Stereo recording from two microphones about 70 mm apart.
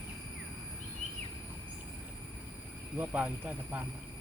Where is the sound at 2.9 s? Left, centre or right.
Right.